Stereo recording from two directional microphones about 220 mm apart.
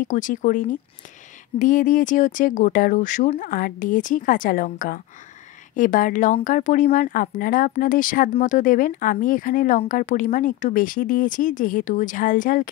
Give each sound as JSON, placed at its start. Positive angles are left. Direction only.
{"t": 0.1, "sound": "speech", "side_deg": 35}